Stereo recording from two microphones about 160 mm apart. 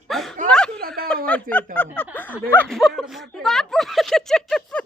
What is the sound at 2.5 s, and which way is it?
Speech, 5° left (ahead or behind).